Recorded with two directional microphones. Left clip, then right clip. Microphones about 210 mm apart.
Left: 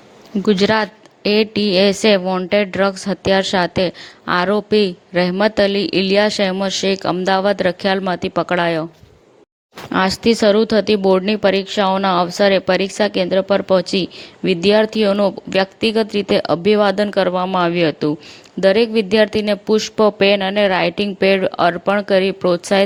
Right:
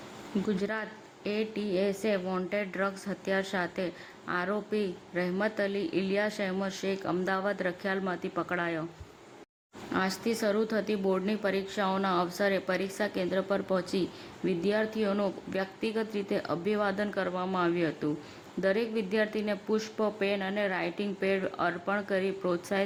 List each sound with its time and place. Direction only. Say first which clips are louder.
0.4 s a woman's voice: left 19 dB; 35° left (ahead or behind)
9.9 s a woman's voice: left 15 dB; 35° left (ahead or behind)